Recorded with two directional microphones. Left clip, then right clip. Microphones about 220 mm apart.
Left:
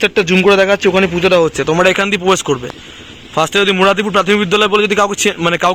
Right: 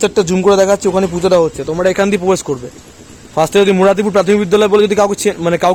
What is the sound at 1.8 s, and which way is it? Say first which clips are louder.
Speech: right 4 dB; 5° left (ahead or behind).